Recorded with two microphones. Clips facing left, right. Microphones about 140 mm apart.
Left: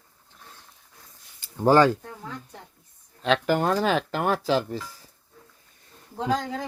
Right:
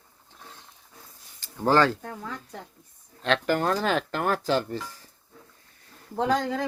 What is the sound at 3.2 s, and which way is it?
Speech, 10° left (ahead or behind).